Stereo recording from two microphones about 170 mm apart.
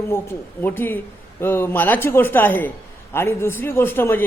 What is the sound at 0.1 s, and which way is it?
A man's voice, 15° left (ahead or behind).